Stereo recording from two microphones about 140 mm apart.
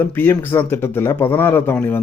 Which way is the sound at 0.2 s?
15° left (ahead or behind).